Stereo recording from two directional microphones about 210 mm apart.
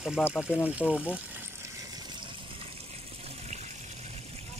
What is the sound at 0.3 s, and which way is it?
Speech, 5° right (ahead or behind).